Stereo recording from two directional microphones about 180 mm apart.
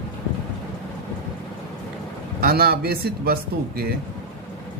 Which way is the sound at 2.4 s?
55° right (ahead or behind).